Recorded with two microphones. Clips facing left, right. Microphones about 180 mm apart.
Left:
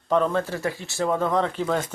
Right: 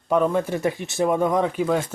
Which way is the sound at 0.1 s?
10° right (ahead or behind).